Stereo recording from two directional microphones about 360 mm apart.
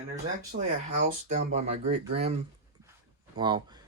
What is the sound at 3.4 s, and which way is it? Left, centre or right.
Speech, centre.